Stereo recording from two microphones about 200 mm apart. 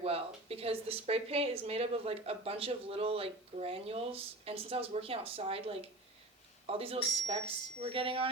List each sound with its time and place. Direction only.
0.0 s speech: 30° right (ahead or behind)